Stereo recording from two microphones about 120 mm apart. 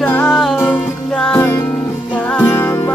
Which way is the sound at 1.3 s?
20° left (ahead or behind).